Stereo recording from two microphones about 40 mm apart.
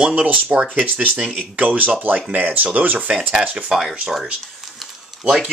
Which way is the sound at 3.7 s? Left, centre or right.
Right.